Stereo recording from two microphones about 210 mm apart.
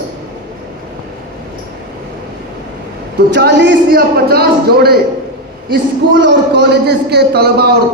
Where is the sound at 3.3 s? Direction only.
55° right (ahead or behind).